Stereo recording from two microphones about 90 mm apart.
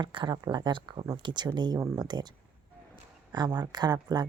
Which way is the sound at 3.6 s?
50° right (ahead or behind).